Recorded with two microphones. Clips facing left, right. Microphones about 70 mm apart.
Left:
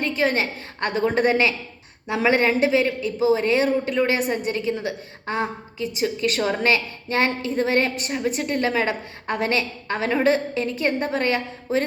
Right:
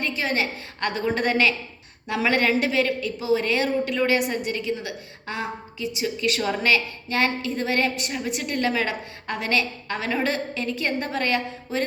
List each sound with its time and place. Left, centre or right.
0.0 s a woman's voice: left